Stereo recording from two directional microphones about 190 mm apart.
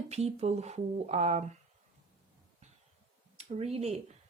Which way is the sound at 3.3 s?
35° right (ahead or behind).